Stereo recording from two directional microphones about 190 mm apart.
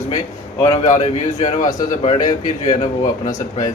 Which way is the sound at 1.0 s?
35° left (ahead or behind).